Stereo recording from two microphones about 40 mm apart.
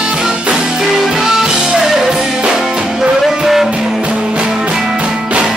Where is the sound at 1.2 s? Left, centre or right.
Centre.